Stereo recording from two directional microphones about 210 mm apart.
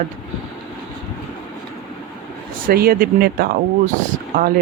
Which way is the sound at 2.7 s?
45° right (ahead or behind).